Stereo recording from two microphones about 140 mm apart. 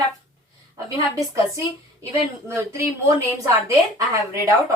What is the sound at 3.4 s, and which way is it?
Speech, 20° right (ahead or behind).